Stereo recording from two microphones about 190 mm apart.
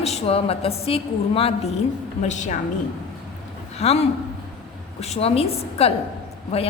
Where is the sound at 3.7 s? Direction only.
35° left (ahead or behind).